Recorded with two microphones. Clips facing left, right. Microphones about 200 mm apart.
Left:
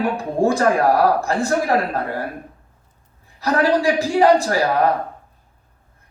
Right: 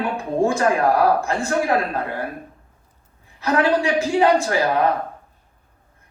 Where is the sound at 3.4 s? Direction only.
35° left (ahead or behind).